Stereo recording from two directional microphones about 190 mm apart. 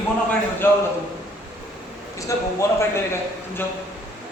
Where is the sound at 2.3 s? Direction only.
15° left (ahead or behind).